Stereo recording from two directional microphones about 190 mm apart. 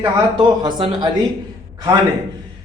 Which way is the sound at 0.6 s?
25° right (ahead or behind).